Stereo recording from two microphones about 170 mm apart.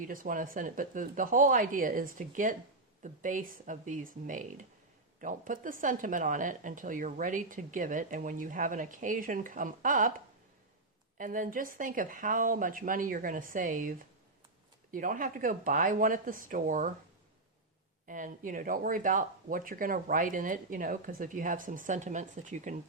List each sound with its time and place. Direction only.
0.0 s speech: 55° right (ahead or behind)
11.2 s speech: 50° right (ahead or behind)
14.9 s speech: 55° right (ahead or behind)
18.1 s speech: 50° right (ahead or behind)